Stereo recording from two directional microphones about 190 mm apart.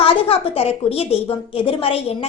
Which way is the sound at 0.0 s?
30° left (ahead or behind).